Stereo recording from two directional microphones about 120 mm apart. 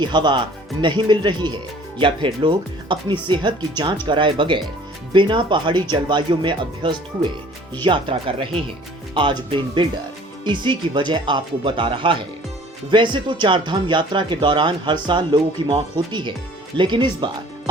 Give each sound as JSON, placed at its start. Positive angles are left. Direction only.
{"t": 0.0, "sound": "speech", "side_deg": -40}